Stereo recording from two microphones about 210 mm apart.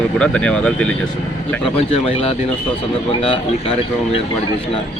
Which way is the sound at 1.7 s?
25° left (ahead or behind).